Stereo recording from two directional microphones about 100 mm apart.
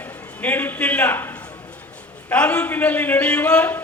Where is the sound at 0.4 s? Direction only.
20° left (ahead or behind).